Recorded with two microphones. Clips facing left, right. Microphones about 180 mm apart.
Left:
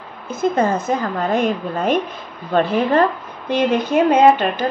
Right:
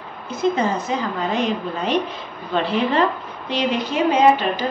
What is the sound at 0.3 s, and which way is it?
A woman's voice, 50° left (ahead or behind).